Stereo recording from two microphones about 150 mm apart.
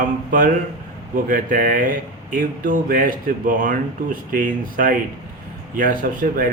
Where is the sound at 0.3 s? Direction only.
65° right (ahead or behind).